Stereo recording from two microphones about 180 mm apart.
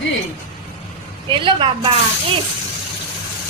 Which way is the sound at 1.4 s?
30° right (ahead or behind).